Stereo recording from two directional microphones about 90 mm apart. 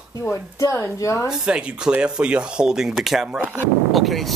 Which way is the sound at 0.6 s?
35° left (ahead or behind).